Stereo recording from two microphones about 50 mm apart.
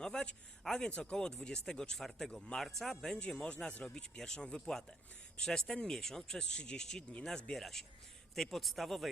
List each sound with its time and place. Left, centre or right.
0.0 s a sound: centre
0.6 s a man's voice: centre
3.2 s speech: left
7.5 s a man's voice: centre